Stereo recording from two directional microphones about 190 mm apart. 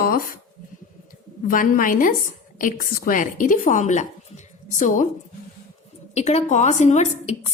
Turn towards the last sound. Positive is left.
turn(degrees=35)  # may be behind; listen again after turning